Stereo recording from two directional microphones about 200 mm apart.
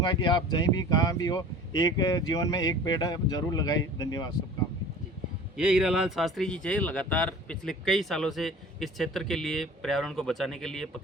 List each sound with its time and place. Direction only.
0.0 s speech: 20° left (ahead or behind)
5.5 s speech: 5° right (ahead or behind)